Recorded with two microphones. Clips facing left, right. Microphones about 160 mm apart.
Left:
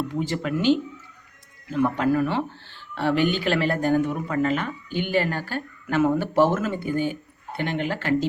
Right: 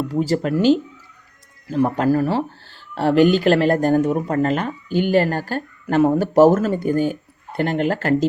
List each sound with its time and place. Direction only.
0.1 s speech: 40° right (ahead or behind)